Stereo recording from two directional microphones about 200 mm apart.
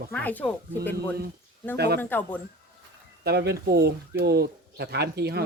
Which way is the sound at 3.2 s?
55° right (ahead or behind).